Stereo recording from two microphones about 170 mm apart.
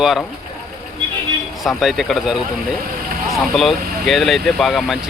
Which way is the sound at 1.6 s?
Centre (ahead or behind).